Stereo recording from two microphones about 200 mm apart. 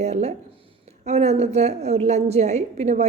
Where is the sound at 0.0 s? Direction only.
35° right (ahead or behind).